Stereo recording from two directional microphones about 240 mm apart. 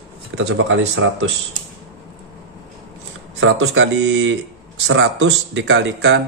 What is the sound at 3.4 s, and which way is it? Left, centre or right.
Speech, right.